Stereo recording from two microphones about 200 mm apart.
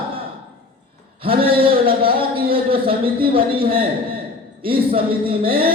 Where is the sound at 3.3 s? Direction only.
25° right (ahead or behind).